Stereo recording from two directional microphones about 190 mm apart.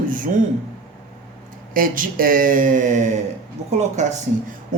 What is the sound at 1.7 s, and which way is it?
Speech, 45° right (ahead or behind).